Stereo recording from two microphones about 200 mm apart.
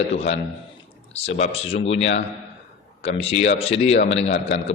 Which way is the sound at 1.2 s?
30° left (ahead or behind).